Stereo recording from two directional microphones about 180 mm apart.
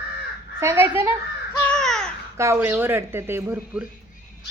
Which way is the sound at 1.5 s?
5° left (ahead or behind).